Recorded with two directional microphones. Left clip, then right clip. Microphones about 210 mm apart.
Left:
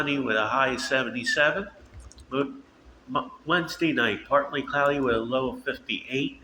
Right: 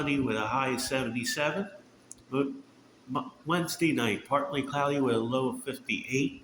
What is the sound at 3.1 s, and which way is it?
Speech, 35° right (ahead or behind).